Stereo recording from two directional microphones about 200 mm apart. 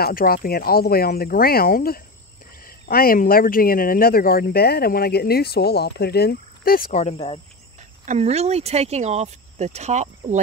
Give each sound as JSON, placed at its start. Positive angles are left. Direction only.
{"t": 0.0, "sound": "speech", "side_deg": 45}
{"t": 8.0, "sound": "speech", "side_deg": -35}